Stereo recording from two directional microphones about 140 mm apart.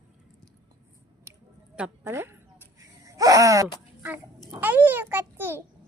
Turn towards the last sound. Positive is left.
turn(degrees=-15)  # may be behind; listen again after turning